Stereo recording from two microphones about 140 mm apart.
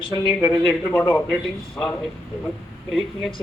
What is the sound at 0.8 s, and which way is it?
Speech, 15° left (ahead or behind).